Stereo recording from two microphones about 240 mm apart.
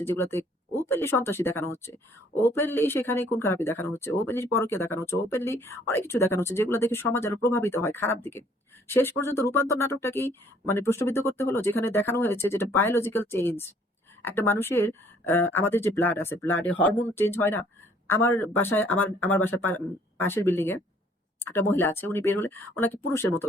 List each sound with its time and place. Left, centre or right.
0.0 s speech: centre